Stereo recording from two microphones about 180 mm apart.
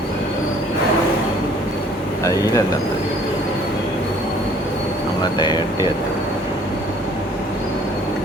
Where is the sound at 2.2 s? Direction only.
20° left (ahead or behind).